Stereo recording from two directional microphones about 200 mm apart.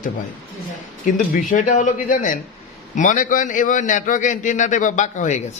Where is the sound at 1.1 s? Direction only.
40° left (ahead or behind).